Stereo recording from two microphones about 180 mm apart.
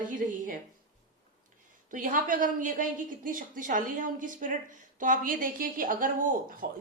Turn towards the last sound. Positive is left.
turn(degrees=-55)  # may be behind; listen again after turning